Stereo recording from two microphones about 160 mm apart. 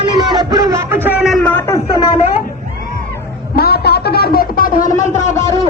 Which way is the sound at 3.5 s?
80° left.